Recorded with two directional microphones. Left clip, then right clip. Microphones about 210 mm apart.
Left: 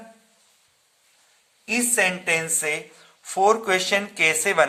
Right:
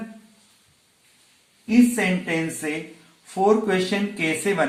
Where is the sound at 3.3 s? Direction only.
45° left (ahead or behind).